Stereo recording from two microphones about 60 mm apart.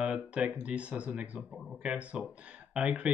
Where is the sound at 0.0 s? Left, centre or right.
Centre.